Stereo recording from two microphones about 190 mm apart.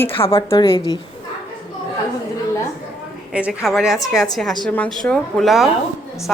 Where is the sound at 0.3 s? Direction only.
20° left (ahead or behind).